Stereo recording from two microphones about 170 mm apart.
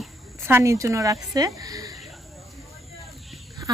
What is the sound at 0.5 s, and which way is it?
A woman's voice, 15° right (ahead or behind).